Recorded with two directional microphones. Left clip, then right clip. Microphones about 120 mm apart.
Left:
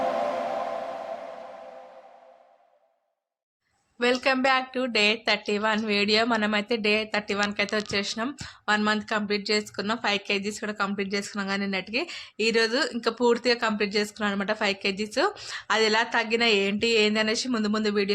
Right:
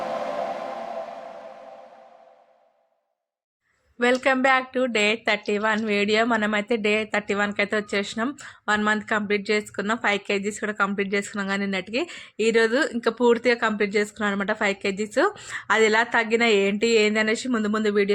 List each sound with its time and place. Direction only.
3.9 s speech: 35° right (ahead or behind)